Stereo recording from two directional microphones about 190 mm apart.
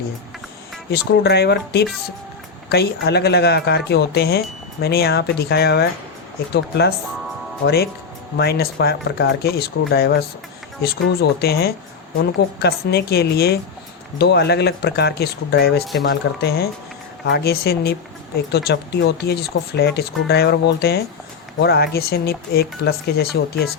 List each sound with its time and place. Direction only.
0.9 s speech: 60° left (ahead or behind)
8.4 s speech: 55° left (ahead or behind)